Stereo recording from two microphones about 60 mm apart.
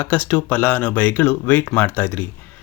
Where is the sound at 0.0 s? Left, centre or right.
Left.